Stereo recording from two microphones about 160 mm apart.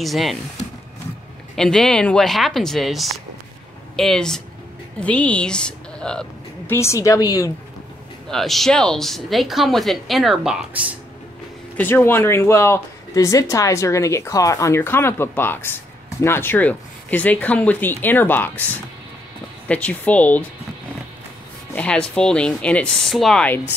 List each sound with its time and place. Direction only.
0.0 s speech: centre (ahead or behind)
1.5 s speech: 5° left (ahead or behind)
6.7 s a woman's voice: 15° left (ahead or behind)
8.3 s speech: centre (ahead or behind)
11.7 s speech: 15° left (ahead or behind)
19.7 s speech: 10° left (ahead or behind)
21.7 s speech: 5° left (ahead or behind)